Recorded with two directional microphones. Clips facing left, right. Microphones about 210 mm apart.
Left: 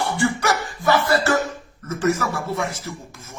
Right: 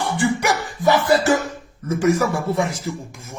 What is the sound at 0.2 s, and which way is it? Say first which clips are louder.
A man's voice: right 2 dB; 15° right (ahead or behind).